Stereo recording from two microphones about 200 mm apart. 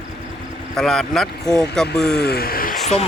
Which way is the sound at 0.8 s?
Centre (ahead or behind).